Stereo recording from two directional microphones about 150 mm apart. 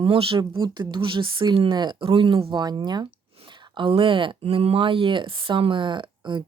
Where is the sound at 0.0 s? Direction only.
40° right (ahead or behind).